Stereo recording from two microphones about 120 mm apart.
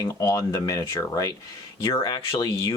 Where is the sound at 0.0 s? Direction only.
25° left (ahead or behind).